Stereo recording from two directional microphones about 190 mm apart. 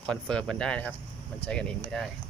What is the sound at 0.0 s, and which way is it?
Speech, 5° left (ahead or behind).